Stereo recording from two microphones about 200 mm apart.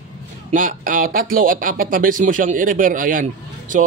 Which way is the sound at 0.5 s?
40° right (ahead or behind).